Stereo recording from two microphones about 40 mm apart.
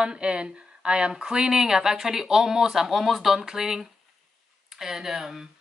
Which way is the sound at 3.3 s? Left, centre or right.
Centre.